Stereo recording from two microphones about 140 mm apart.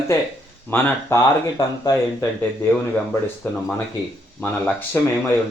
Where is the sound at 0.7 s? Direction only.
15° left (ahead or behind).